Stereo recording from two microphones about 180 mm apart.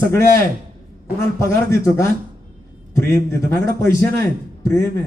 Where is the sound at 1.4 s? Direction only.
15° left (ahead or behind).